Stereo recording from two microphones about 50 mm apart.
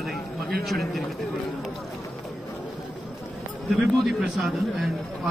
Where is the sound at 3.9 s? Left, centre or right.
Centre.